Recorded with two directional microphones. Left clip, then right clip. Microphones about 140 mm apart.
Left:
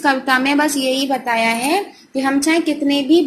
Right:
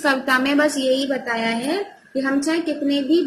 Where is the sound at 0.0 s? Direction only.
Centre (ahead or behind).